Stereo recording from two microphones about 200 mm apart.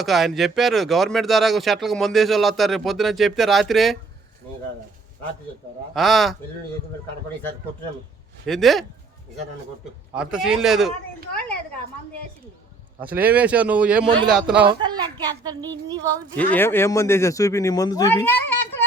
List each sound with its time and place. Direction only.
0.0 s speech: centre (ahead or behind)
5.9 s speech: centre (ahead or behind)
8.4 s speech: centre (ahead or behind)
10.2 s speech: 5° right (ahead or behind)
13.0 s speech: 10° right (ahead or behind)
14.8 s a woman's voice: 20° right (ahead or behind)
16.3 s speech: 5° left (ahead or behind)